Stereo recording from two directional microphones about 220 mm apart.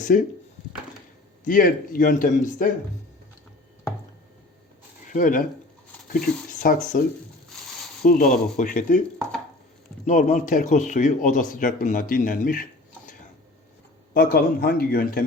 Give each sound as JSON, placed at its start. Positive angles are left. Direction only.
{"t": 0.0, "sound": "speech", "side_deg": 35}
{"t": 1.5, "sound": "a man's voice", "side_deg": 40}
{"t": 5.1, "sound": "a man's voice", "side_deg": 40}
{"t": 8.0, "sound": "a man's voice", "side_deg": 40}
{"t": 10.1, "sound": "a man's voice", "side_deg": 35}
{"t": 14.1, "sound": "speech", "side_deg": 45}